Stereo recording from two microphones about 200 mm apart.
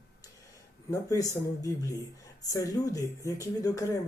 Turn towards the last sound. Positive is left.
turn(degrees=15)  # may be behind; listen again after turning